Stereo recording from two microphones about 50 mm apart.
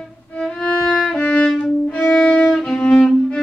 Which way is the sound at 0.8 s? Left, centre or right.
Left.